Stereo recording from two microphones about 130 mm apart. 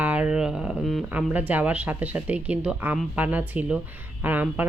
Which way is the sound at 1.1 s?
10° right (ahead or behind).